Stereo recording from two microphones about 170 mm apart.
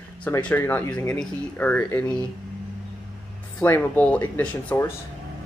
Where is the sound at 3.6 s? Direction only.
10° left (ahead or behind).